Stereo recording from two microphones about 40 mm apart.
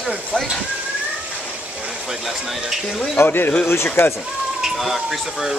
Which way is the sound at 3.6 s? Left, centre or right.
Left.